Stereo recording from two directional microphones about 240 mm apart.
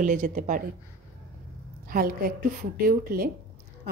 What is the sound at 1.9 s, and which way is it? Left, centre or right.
Speech, right.